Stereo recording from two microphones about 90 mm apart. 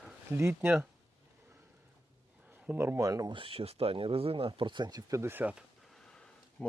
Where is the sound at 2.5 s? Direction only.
20° right (ahead or behind).